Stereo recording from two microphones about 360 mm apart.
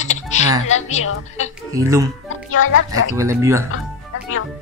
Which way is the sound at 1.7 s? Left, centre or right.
Centre.